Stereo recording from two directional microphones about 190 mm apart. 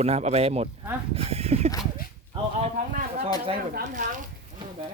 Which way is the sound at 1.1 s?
30° right (ahead or behind).